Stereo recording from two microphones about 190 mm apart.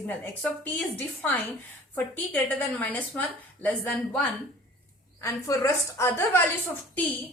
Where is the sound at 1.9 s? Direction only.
10° left (ahead or behind).